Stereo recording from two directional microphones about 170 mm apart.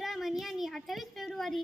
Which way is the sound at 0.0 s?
Centre (ahead or behind).